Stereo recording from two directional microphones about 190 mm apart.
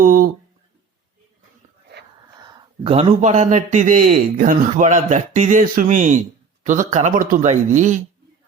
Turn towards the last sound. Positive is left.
turn(degrees=-40)  # may be behind; listen again after turning